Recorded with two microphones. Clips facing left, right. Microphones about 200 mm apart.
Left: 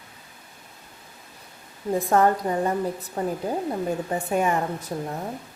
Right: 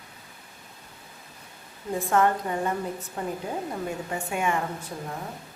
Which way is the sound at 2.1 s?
35° left (ahead or behind).